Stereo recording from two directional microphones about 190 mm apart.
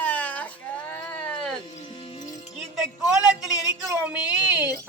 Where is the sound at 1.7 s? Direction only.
25° left (ahead or behind).